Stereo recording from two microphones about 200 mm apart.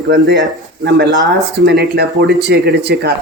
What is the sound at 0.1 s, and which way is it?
Speech, 60° right (ahead or behind).